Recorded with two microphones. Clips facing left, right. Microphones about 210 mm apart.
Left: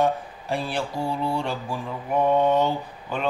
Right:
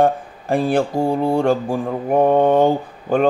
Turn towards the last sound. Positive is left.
turn(degrees=-50)  # may be behind; listen again after turning